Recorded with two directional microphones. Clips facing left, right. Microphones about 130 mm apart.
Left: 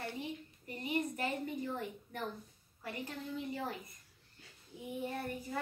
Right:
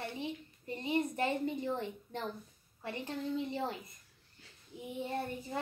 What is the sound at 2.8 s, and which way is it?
A child's voice, 25° right (ahead or behind).